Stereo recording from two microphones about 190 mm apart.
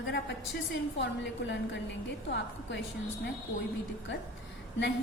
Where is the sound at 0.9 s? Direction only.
65° left (ahead or behind).